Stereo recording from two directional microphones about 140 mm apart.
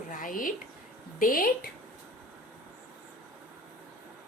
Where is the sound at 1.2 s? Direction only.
90° left.